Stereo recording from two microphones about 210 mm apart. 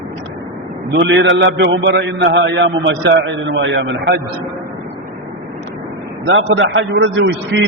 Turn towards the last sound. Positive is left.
turn(degrees=-60)  # may be behind; listen again after turning